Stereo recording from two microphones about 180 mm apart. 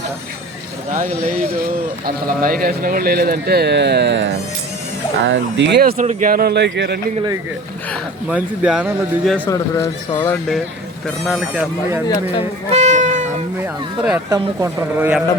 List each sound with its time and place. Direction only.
0.9 s speech: 45° right (ahead or behind); by 4.4 s 75° right (ahead or behind)
5.2 s speech: 85° right
6.0 s speech: 45° right (ahead or behind); by 7.0 s 70° right (ahead or behind)
8.3 s speech: 5° right (ahead or behind)
9.5 s speech: 20° left (ahead or behind)
11.3 s speech: centre (ahead or behind)
12.7 s cat: 40° right (ahead or behind)
13.6 s speech: 5° right (ahead or behind)
14.3 s a man's voice: 15° right (ahead or behind)